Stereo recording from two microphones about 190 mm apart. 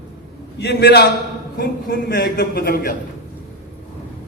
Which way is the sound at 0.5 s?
60° left (ahead or behind).